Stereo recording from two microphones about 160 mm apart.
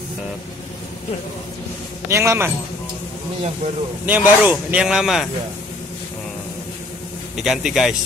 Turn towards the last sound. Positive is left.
turn(degrees=0)  # may be behind; listen again after turning